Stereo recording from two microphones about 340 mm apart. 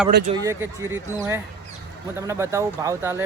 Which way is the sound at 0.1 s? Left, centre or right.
Right.